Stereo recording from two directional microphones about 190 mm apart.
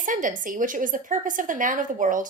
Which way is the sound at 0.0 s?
45° right (ahead or behind).